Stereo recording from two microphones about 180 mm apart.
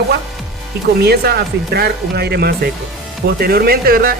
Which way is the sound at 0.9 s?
60° right (ahead or behind).